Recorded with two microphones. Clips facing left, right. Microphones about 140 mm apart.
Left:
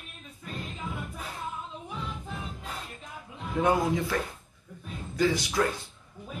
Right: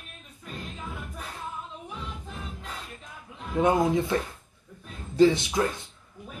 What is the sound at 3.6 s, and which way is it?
Speech, 25° right (ahead or behind).